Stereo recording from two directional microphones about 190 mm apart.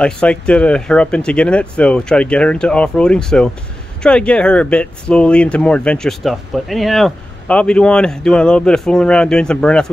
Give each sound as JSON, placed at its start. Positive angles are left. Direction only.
{"t": 0.0, "sound": "speech", "side_deg": 5}